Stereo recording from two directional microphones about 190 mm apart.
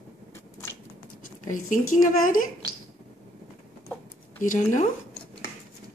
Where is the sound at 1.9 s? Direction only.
45° left (ahead or behind).